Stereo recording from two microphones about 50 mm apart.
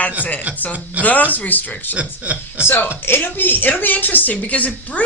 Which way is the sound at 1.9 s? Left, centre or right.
Right.